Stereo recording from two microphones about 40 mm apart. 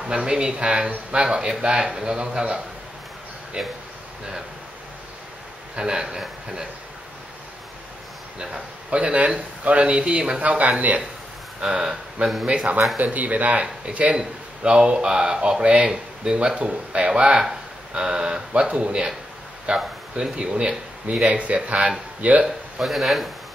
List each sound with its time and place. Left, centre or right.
0.0 s speech: right
5.8 s speech: centre
8.9 s speech: right
10.6 s speech: right
11.6 s speech: centre
12.9 s speech: right
13.6 s speech: right
18.5 s speech: right
22.8 s speech: centre